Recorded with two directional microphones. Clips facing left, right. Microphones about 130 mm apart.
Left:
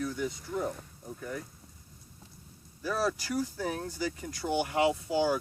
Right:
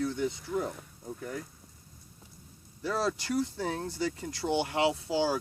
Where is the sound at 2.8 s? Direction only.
25° right (ahead or behind).